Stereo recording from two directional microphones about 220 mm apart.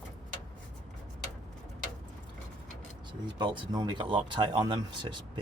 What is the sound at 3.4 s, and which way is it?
Speech, 20° right (ahead or behind).